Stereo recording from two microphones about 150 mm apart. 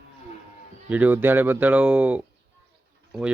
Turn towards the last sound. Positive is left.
turn(degrees=-5)  # may be behind; listen again after turning